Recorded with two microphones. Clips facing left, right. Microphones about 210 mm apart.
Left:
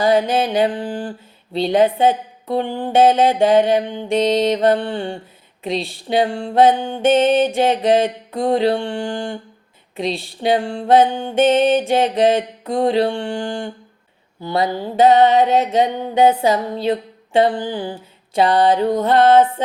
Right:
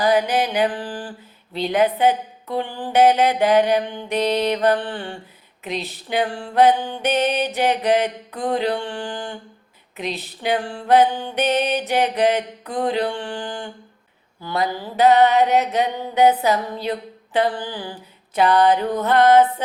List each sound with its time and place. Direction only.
0.0 s music: 25° left (ahead or behind)